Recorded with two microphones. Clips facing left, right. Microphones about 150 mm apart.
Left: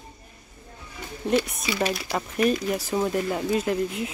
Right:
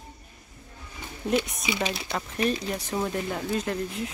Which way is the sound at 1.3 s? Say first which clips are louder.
Left 2 dB; 15° right (ahead or behind).